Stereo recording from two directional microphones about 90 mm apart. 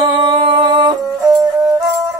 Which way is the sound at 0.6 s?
55° right (ahead or behind).